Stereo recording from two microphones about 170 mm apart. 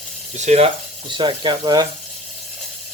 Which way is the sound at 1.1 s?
25° right (ahead or behind).